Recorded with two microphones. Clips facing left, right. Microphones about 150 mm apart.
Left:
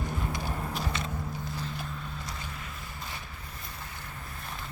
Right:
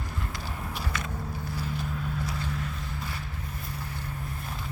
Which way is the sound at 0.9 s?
25° left (ahead or behind).